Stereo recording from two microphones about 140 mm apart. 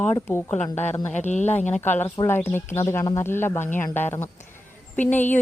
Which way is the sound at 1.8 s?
15° left (ahead or behind).